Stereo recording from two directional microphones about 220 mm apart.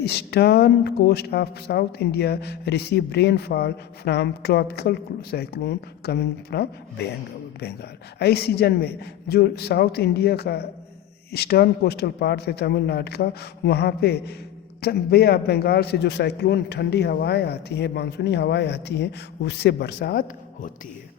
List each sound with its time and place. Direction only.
0.0 s speech: 50° left (ahead or behind)